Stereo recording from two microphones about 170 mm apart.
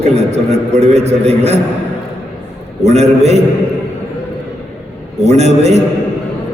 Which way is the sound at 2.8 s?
40° right (ahead or behind).